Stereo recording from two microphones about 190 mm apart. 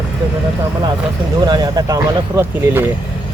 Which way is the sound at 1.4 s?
20° right (ahead or behind).